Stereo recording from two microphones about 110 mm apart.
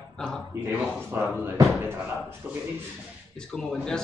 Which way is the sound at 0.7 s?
20° right (ahead or behind).